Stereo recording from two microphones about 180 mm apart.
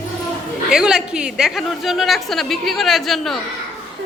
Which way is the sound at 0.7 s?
5° right (ahead or behind).